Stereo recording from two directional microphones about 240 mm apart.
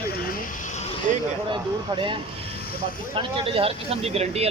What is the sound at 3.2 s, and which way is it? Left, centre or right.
Speech, right.